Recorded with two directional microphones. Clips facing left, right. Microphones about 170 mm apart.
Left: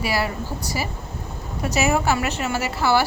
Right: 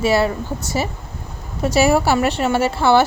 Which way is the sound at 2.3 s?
30° right (ahead or behind).